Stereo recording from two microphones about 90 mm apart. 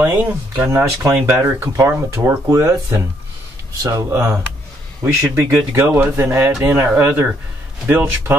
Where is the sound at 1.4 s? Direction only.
40° right (ahead or behind).